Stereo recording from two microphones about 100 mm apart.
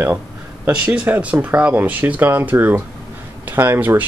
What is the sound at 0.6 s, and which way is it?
Speech, 10° right (ahead or behind).